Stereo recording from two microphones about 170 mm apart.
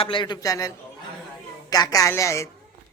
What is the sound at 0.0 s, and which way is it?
Speech, 30° left (ahead or behind).